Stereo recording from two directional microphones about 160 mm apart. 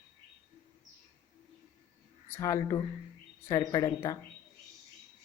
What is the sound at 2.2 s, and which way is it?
Speech, 15° left (ahead or behind).